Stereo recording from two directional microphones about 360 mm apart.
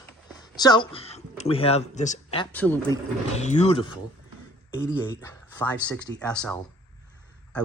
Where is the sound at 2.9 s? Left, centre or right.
Centre.